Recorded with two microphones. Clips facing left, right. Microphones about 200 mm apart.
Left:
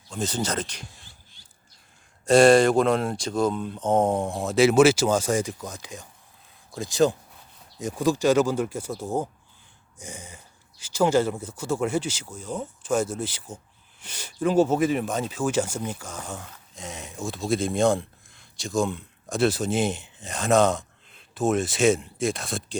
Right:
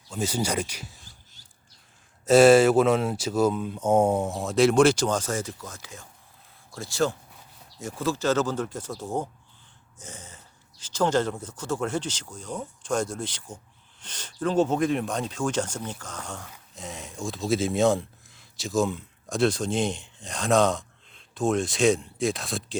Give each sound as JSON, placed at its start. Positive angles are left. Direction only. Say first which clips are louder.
{"t": 0.1, "sound": "speech", "louder": "right 1 dB", "side_deg": -10}
{"t": 1.0, "sound": "a sound", "louder": "even", "side_deg": -45}
{"t": 2.2, "sound": "speech", "louder": "even", "side_deg": -5}